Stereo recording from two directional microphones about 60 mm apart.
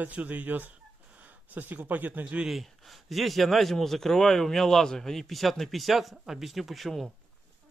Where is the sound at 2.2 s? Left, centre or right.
Centre.